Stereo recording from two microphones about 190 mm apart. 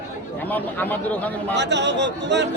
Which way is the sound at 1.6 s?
65° right (ahead or behind).